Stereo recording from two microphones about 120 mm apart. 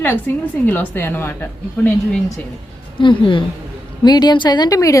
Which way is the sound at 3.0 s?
45° left (ahead or behind).